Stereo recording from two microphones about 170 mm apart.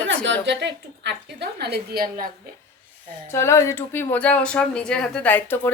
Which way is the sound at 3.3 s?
15° left (ahead or behind).